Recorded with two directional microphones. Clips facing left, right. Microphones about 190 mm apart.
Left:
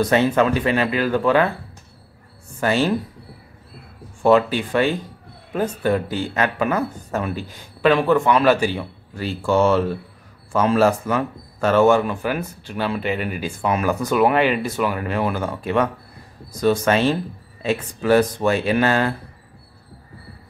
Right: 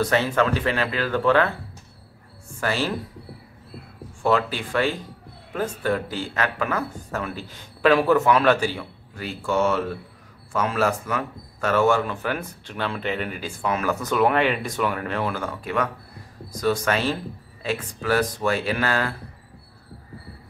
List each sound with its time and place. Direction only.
0.0 s a man's voice: 20° left (ahead or behind)
2.6 s speech: 20° left (ahead or behind)
4.2 s speech: 20° left (ahead or behind)
7.8 s speech: 5° right (ahead or behind)
8.5 s a man's voice: 15° left (ahead or behind)
9.1 s a man's voice: 30° left (ahead or behind)